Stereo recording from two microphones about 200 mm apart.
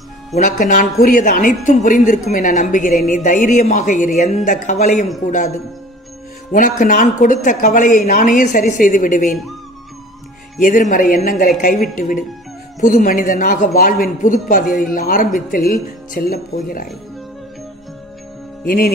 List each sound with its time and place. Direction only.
0.3 s speech: 40° left (ahead or behind)
6.5 s speech: 40° left (ahead or behind)
10.6 s speech: 40° left (ahead or behind)